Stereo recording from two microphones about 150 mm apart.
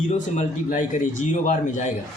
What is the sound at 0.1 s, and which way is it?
A man's voice, 55° left (ahead or behind).